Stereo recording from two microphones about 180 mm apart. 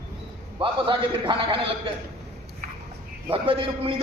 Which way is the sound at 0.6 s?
30° right (ahead or behind).